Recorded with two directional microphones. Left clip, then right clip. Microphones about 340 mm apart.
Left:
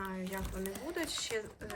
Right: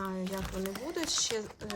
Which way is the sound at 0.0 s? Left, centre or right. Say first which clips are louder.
Right 4 dB; centre.